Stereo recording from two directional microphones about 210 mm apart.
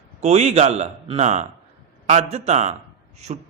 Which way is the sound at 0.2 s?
30° right (ahead or behind).